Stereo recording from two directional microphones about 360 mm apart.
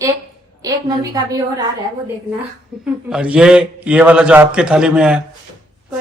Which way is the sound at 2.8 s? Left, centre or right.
Centre.